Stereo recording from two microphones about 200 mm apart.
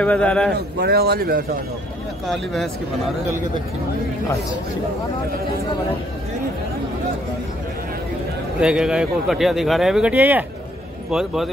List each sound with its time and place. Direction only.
0.0 s speech: 5° left (ahead or behind)
0.6 s speech: 55° right (ahead or behind)
2.2 s speech: centre (ahead or behind)
8.5 s speech: 5° right (ahead or behind)